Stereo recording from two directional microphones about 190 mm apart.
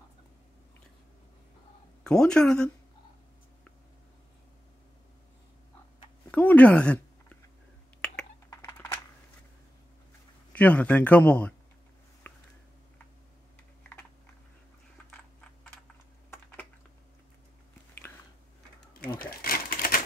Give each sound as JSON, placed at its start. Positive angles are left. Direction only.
{"t": 2.0, "sound": "speech", "side_deg": 5}
{"t": 6.3, "sound": "a sound", "side_deg": 10}
{"t": 8.0, "sound": "computer keyboard", "side_deg": 5}
{"t": 8.5, "sound": "typing", "side_deg": 15}
{"t": 10.5, "sound": "speech", "side_deg": 10}
{"t": 12.2, "sound": "a sound", "side_deg": 10}
{"t": 19.0, "sound": "cash register", "side_deg": 50}
{"t": 19.4, "sound": "typewriter", "side_deg": 50}